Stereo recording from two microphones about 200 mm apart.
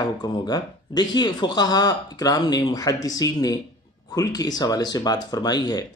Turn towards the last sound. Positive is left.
turn(degrees=20)  # may be behind; listen again after turning